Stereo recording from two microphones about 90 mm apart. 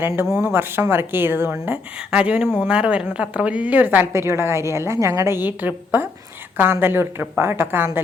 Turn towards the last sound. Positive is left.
turn(degrees=-25)  # may be behind; listen again after turning